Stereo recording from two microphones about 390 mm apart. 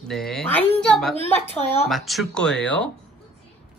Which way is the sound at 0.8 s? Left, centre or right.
Centre.